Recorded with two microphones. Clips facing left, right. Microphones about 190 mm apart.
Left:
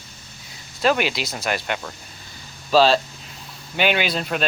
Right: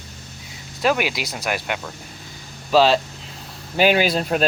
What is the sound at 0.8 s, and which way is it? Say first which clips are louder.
Speech: even; 10° right (ahead or behind).